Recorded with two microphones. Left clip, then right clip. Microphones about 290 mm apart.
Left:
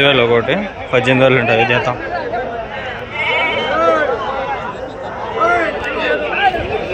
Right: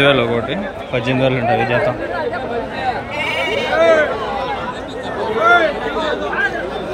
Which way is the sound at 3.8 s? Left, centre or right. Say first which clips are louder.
Right 2 dB; centre.